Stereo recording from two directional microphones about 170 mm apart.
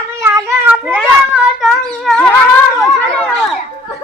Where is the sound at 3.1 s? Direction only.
5° left (ahead or behind).